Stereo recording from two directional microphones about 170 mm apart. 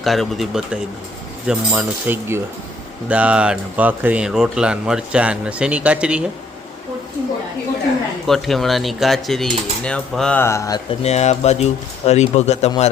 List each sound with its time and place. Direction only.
0.0 s speech: centre (ahead or behind)
8.3 s speech: centre (ahead or behind); by 10.8 s 15° left (ahead or behind)
11.0 s speech: 40° left (ahead or behind)